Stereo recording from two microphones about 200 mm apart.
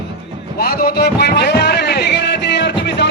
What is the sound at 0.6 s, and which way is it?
Music, 50° left (ahead or behind).